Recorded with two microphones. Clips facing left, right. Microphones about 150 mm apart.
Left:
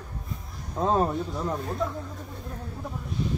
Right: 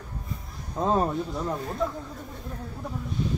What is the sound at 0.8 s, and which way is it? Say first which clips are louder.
Speech: even; centre (ahead or behind).